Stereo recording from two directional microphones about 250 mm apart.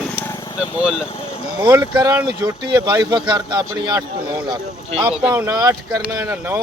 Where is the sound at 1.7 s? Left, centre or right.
Centre.